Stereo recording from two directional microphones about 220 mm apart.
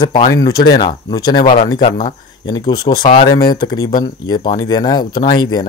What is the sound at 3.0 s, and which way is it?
Speech, 30° left (ahead or behind).